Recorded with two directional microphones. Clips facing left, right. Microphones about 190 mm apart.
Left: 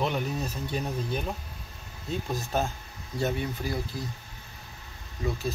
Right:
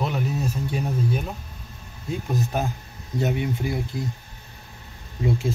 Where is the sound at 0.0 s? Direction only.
5° right (ahead or behind).